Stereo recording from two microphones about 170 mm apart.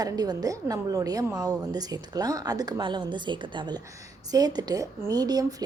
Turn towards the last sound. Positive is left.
turn(degrees=-20)  # may be behind; listen again after turning